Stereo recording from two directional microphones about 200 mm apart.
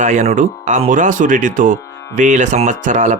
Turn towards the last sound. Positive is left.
turn(degrees=-40)  # may be behind; listen again after turning